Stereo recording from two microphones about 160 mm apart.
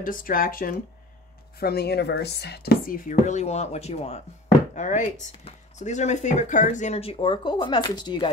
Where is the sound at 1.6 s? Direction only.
80° left.